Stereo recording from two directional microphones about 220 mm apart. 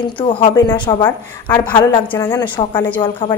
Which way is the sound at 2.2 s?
20° left (ahead or behind).